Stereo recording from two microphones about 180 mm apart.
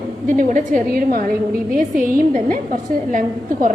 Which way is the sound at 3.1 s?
45° right (ahead or behind).